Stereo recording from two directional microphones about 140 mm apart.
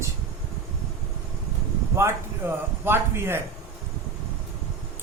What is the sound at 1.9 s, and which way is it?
A man's voice, 20° right (ahead or behind).